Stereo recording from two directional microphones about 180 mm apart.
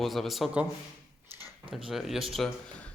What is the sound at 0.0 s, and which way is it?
Speech, centre (ahead or behind).